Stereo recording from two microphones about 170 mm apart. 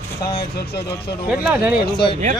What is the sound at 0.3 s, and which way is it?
Speech, 65° left (ahead or behind).